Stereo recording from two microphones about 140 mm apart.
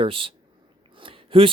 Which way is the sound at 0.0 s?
40° right (ahead or behind).